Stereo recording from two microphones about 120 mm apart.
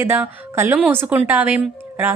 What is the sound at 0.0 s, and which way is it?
A woman's voice, 20° right (ahead or behind).